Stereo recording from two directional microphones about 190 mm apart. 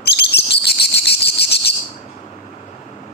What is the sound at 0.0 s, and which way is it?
Cricket, 60° left (ahead or behind).